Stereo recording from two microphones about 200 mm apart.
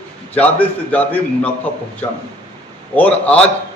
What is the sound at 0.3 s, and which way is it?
A man's voice, 10° left (ahead or behind).